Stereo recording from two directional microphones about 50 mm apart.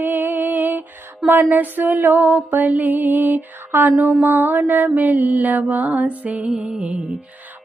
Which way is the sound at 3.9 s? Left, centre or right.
Centre.